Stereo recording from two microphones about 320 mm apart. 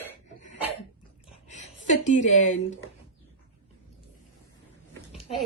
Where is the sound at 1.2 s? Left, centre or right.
Left.